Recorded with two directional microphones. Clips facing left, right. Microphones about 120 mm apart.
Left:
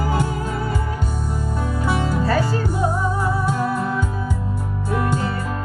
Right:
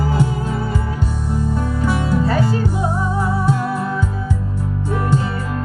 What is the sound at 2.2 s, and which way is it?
Music, 20° right (ahead or behind).